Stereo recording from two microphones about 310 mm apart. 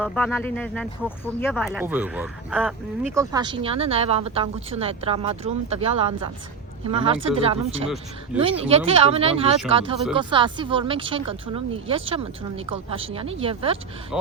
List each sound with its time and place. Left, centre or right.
0.0 s speech: centre
3.2 s speech: centre